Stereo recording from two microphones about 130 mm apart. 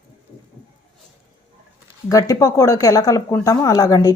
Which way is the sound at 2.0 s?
25° left (ahead or behind).